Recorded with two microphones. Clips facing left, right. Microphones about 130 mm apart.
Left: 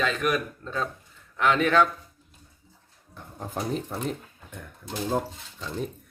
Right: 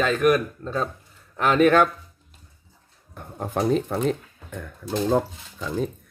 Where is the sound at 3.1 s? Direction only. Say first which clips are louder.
Right 7 dB; 60° right (ahead or behind); by 4.6 s 85° right.